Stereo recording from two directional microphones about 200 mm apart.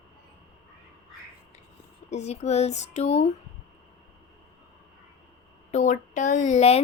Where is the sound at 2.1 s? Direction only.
35° left (ahead or behind).